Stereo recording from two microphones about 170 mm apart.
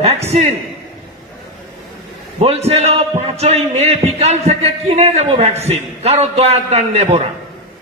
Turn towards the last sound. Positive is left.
turn(degrees=-40)  # may be behind; listen again after turning